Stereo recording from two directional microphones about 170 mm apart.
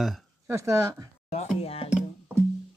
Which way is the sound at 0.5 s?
15° right (ahead or behind).